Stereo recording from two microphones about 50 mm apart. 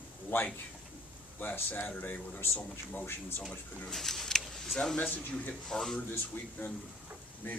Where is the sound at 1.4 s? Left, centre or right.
Left.